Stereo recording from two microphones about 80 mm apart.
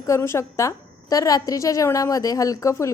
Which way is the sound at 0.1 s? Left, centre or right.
Left.